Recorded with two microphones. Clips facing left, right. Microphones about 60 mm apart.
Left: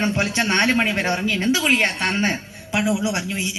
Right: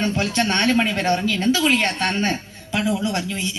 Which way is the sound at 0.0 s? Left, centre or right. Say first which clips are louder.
Even; centre.